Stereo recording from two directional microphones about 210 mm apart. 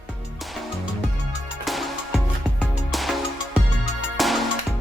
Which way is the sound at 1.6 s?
Centre (ahead or behind).